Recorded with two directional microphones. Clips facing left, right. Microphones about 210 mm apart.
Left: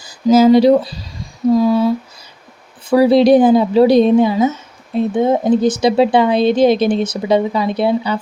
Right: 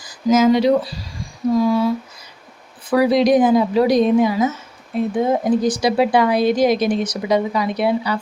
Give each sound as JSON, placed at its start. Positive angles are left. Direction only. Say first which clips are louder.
{"t": 0.0, "sound": "speech", "louder": "left 4 dB", "side_deg": 30}
{"t": 2.9, "sound": "speech", "louder": "left 5 dB", "side_deg": 30}